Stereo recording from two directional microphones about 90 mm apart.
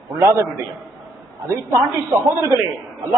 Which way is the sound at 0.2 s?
35° right (ahead or behind).